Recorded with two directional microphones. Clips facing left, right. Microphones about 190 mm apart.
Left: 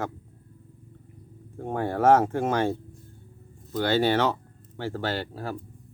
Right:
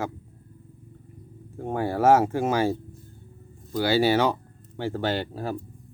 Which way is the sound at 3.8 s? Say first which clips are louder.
Right 2 dB; 10° right (ahead or behind).